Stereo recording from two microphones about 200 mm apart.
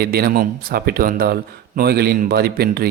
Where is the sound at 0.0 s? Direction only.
50° right (ahead or behind).